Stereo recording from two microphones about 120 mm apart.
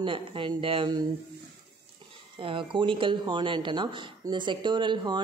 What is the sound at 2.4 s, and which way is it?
Speech, 45° right (ahead or behind).